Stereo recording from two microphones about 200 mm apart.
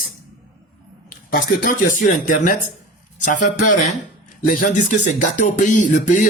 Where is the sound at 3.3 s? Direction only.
40° left (ahead or behind).